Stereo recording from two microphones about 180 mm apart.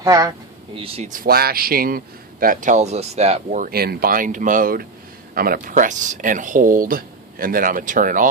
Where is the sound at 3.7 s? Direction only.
60° right (ahead or behind).